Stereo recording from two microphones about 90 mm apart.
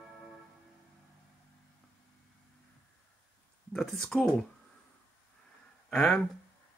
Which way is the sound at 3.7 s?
5° left (ahead or behind).